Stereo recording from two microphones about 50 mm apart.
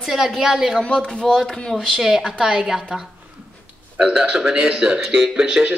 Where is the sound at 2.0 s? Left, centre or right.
Centre.